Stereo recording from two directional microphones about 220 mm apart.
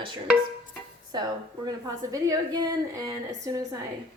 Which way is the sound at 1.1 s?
20° right (ahead or behind).